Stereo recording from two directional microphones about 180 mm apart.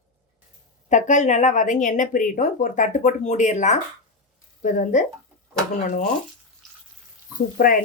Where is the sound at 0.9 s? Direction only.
40° left (ahead or behind).